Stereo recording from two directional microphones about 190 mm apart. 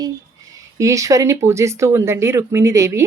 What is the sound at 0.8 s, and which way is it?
Speech, 15° right (ahead or behind).